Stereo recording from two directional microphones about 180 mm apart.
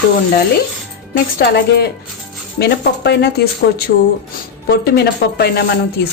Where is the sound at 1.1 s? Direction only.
65° left (ahead or behind).